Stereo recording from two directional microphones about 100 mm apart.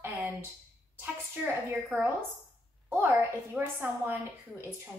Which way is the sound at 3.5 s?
20° right (ahead or behind).